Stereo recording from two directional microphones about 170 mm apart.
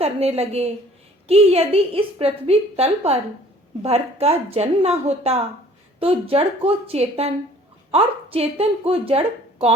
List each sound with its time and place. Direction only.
0.0 s a woman's voice: 35° right (ahead or behind)